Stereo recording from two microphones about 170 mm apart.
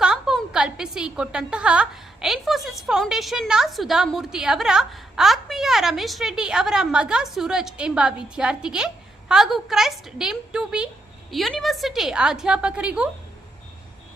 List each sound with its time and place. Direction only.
0.0 s a woman's voice: 5° right (ahead or behind)